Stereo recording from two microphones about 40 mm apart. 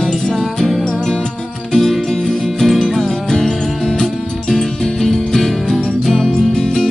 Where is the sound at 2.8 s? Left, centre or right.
Centre.